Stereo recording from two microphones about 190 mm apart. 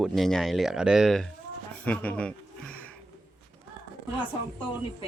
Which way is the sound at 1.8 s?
5° left (ahead or behind).